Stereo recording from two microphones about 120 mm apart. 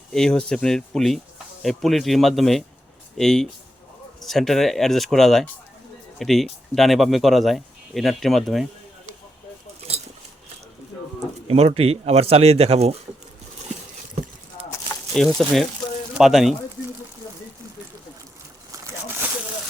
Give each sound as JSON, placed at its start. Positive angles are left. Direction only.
{"t": 0.1, "sound": "speech", "side_deg": 5}
{"t": 11.4, "sound": "speech", "side_deg": -55}
{"t": 15.1, "sound": "speech", "side_deg": 5}
{"t": 18.7, "sound": "slosh", "side_deg": -25}